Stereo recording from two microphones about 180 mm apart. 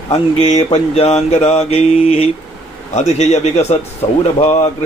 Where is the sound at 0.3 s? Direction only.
40° left (ahead or behind).